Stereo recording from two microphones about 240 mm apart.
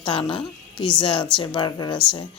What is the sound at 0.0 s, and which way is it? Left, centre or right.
Speech, left.